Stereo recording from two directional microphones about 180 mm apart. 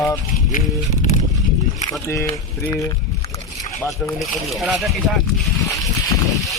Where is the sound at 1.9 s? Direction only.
15° left (ahead or behind).